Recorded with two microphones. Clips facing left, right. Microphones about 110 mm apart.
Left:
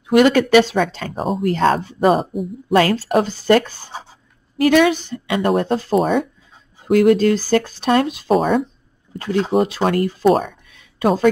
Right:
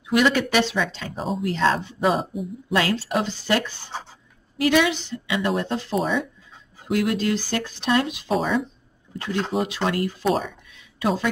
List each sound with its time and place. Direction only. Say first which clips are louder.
0.0 s speech: left 7 dB; 50° left (ahead or behind)
8.4 s speech: left 5 dB; 50° left (ahead or behind)
9.6 s speech: left 6 dB; 40° left (ahead or behind)
10.3 s a sound: left 7 dB; 50° left (ahead or behind)